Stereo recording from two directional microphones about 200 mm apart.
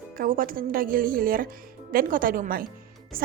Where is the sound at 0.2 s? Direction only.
45° right (ahead or behind).